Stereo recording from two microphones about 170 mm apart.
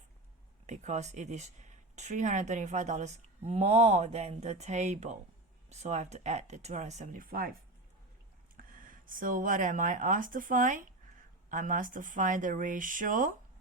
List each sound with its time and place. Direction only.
0.7 s speech: 40° right (ahead or behind); by 7.5 s 55° right (ahead or behind)
8.5 s speech: 55° right (ahead or behind)